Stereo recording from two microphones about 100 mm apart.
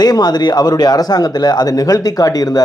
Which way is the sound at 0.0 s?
40° left (ahead or behind).